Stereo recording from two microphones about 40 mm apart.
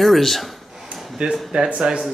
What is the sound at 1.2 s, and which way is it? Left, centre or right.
Speech, right.